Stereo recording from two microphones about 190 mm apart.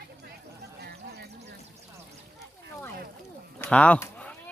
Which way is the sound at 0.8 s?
55° right (ahead or behind).